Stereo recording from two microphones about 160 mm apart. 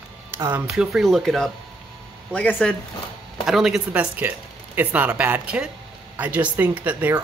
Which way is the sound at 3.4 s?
Centre (ahead or behind).